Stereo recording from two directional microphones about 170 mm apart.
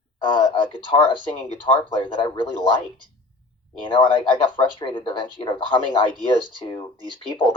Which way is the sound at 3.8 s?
30° left (ahead or behind).